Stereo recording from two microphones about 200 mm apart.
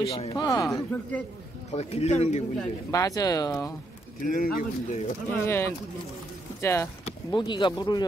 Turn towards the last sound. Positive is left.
turn(degrees=20)  # may be behind; listen again after turning